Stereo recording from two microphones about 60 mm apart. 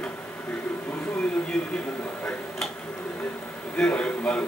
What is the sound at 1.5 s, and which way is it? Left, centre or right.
Speech, centre.